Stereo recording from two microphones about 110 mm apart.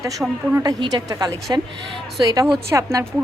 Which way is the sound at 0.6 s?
35° right (ahead or behind).